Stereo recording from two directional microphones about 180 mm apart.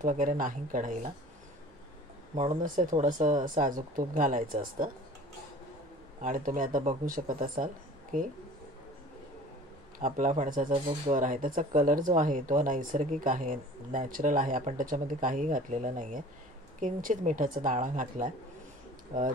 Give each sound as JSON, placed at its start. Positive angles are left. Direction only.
{"t": 0.0, "sound": "speech", "side_deg": -45}
{"t": 2.3, "sound": "speech", "side_deg": -45}
{"t": 6.2, "sound": "speech", "side_deg": -45}
{"t": 9.9, "sound": "speech", "side_deg": -45}